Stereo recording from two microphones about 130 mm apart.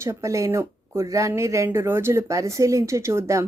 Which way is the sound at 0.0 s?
20° right (ahead or behind).